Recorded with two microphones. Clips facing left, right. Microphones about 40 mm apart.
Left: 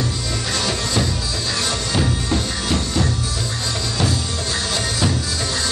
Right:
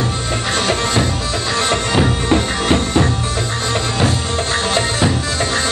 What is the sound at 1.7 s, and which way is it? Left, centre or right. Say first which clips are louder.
Music: right 7 dB; right.